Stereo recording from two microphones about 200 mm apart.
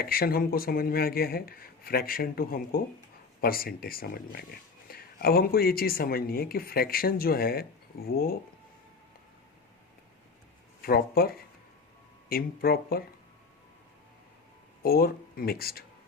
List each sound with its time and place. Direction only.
0.0 s speech: 50° left (ahead or behind)
10.8 s speech: 50° left (ahead or behind)
14.8 s speech: 50° left (ahead or behind)